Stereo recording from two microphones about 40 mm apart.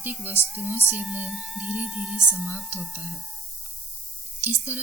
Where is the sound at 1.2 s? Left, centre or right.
Centre.